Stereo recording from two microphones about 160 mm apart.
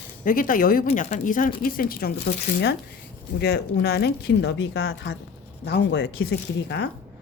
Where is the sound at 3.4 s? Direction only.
90° left.